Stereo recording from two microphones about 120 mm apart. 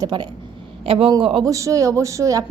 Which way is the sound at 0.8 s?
50° right (ahead or behind).